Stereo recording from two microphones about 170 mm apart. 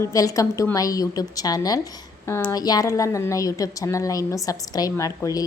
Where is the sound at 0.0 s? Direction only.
20° left (ahead or behind).